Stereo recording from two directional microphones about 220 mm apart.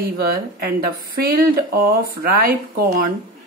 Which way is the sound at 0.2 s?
45° right (ahead or behind).